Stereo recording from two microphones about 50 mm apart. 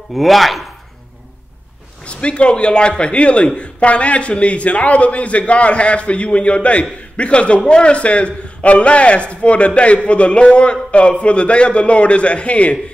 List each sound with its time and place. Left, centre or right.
0.1 s speech: centre
2.0 s speech: left